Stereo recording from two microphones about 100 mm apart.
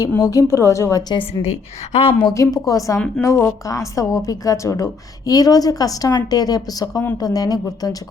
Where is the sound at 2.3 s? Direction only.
35° left (ahead or behind).